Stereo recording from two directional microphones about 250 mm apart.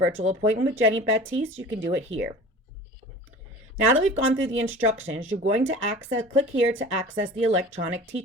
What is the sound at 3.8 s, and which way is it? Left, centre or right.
Speech, right.